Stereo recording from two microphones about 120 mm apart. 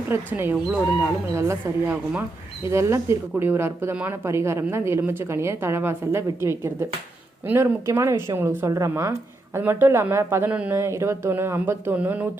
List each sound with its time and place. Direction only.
0.1 s a woman's voice: 20° right (ahead or behind)
10.5 s a woman's voice: 10° right (ahead or behind)
10.8 s speech: 20° right (ahead or behind)